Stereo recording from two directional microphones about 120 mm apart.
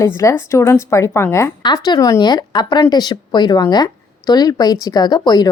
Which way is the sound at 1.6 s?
40° left (ahead or behind).